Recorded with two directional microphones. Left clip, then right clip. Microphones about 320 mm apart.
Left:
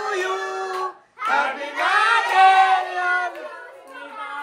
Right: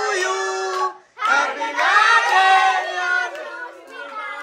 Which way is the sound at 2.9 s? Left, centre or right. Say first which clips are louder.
Right 1 dB; centre.